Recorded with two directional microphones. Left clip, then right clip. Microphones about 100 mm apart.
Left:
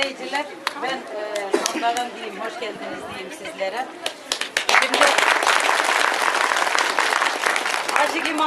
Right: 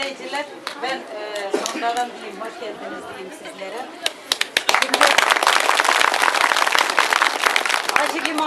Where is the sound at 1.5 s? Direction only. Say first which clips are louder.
Left 2 dB; 10° left (ahead or behind).